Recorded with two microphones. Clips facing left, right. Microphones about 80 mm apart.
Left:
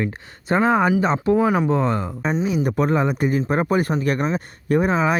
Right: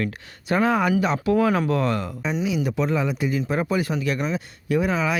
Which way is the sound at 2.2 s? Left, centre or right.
Left.